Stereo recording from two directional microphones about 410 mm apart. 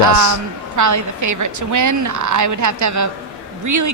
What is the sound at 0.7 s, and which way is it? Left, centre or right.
A woman's voice, right.